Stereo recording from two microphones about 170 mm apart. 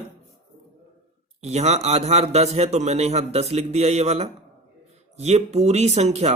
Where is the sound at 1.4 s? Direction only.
40° right (ahead or behind).